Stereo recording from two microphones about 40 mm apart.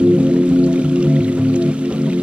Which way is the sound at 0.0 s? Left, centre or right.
Right.